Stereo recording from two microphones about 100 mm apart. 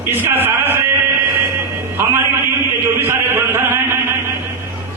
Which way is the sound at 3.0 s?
25° right (ahead or behind).